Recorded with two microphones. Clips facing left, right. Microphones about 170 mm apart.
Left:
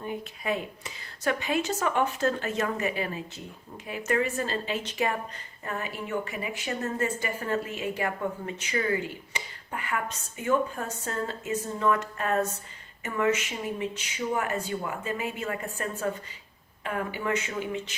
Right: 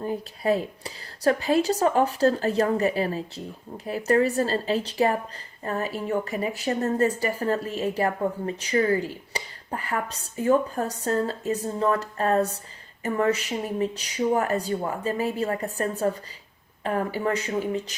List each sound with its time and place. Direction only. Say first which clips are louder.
0.0 s a woman's voice: right 6 dB; 35° right (ahead or behind)